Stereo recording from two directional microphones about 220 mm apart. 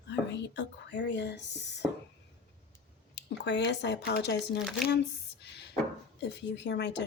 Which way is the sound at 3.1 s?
50° left (ahead or behind).